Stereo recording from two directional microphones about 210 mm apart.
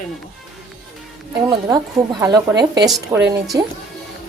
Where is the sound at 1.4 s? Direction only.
15° right (ahead or behind).